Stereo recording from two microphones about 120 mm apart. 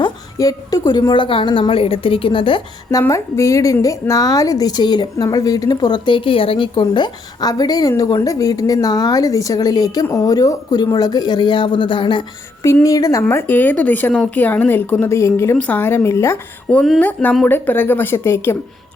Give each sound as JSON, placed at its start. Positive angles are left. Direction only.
{"t": 0.3, "sound": "a woman's voice", "side_deg": 30}
{"t": 3.1, "sound": "a woman's voice", "side_deg": 25}
{"t": 12.8, "sound": "a woman's voice", "side_deg": 30}
{"t": 13.2, "sound": "a woman's voice", "side_deg": 15}